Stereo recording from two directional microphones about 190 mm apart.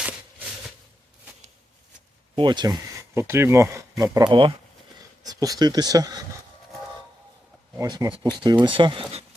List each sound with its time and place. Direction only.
0.0 s a sound: 5° right (ahead or behind)
2.3 s speech: 25° right (ahead or behind)
7.8 s speech: 20° right (ahead or behind)